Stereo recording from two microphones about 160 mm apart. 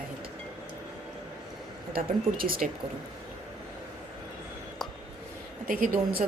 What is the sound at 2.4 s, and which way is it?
Speech, 65° right (ahead or behind).